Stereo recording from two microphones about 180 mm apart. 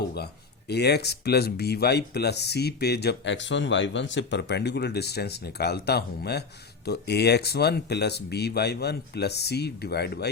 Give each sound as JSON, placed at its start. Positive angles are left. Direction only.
{"t": 0.7, "sound": "speech", "side_deg": 65}